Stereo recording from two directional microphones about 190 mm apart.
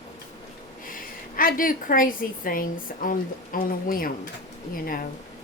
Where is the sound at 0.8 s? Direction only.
50° left (ahead or behind).